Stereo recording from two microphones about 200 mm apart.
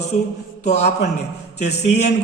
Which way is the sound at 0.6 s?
35° left (ahead or behind).